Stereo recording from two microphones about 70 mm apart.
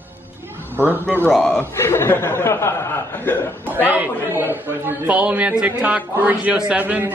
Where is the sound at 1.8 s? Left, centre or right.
Left.